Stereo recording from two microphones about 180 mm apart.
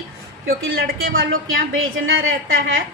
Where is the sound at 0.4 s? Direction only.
90° right.